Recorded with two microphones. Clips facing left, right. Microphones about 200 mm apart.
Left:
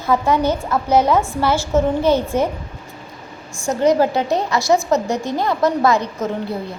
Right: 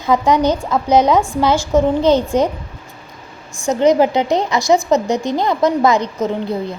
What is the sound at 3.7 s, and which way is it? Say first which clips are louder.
A woman's voice: right 3 dB; 20° right (ahead or behind).